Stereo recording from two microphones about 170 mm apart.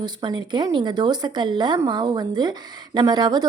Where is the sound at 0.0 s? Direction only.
25° right (ahead or behind).